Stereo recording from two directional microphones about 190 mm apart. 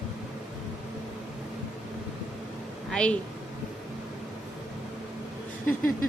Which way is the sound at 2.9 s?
5° left (ahead or behind).